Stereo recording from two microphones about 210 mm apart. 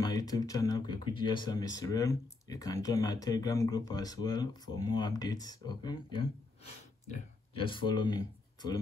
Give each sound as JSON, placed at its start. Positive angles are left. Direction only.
{"t": 0.0, "sound": "speech", "side_deg": 20}
{"t": 7.5, "sound": "speech", "side_deg": 25}